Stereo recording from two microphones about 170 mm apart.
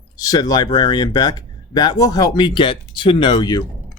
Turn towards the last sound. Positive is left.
turn(degrees=25)  # may be behind; listen again after turning